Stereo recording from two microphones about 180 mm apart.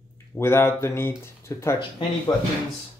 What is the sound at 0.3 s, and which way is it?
Speech, 15° left (ahead or behind).